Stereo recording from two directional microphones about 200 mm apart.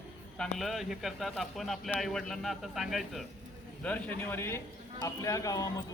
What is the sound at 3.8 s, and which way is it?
A man's voice, 10° left (ahead or behind).